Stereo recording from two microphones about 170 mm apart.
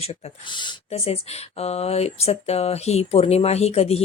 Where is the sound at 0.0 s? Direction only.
30° left (ahead or behind).